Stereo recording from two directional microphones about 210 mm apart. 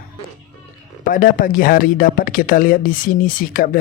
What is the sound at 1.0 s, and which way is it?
Speech, 40° left (ahead or behind).